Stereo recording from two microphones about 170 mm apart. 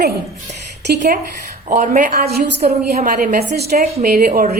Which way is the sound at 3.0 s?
50° right (ahead or behind).